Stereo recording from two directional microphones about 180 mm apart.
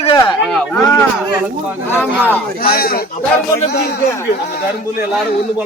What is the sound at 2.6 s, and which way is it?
Speech, 55° left (ahead or behind).